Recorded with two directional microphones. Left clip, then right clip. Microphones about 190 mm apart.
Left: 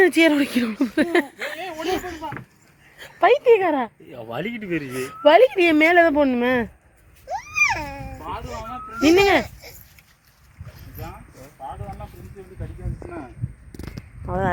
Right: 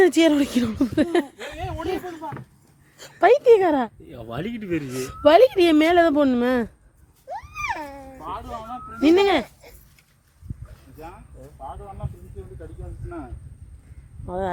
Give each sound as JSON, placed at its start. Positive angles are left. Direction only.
{"t": 0.0, "sound": "a woman's voice", "side_deg": -10}
{"t": 3.0, "sound": "speech", "side_deg": -25}
{"t": 4.1, "sound": "speech", "side_deg": -65}
{"t": 4.9, "sound": "a woman's voice", "side_deg": -25}
{"t": 7.3, "sound": "a sound", "side_deg": 30}
{"t": 9.0, "sound": "speech", "side_deg": 0}
{"t": 14.3, "sound": "speech", "side_deg": 15}